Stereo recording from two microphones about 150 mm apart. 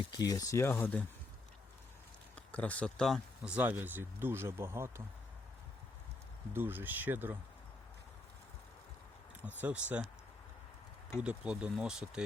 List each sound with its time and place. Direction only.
0.1 s speech: 25° left (ahead or behind)
2.3 s speech: 10° left (ahead or behind)
3.4 s speech: 10° right (ahead or behind)
6.5 s speech: 15° right (ahead or behind)
9.6 s speech: 10° right (ahead or behind)
11.2 s speech: 5° right (ahead or behind)